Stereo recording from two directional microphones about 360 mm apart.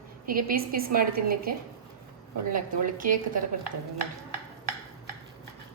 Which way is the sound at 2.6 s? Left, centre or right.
Right.